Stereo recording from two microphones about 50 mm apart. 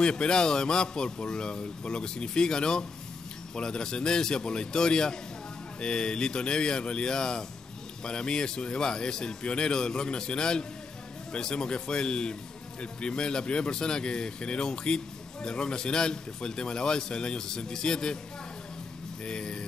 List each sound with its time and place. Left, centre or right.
0.0 s a man's voice: centre
19.2 s a man's voice: centre